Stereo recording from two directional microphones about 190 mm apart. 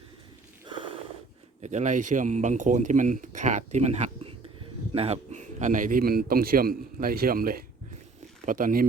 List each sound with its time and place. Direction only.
1.6 s a man's voice: 40° right (ahead or behind)